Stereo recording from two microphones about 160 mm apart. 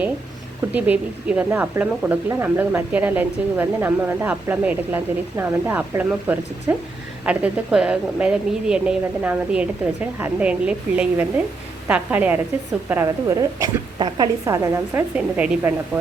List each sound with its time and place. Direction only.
0.7 s a woman's voice: 10° right (ahead or behind)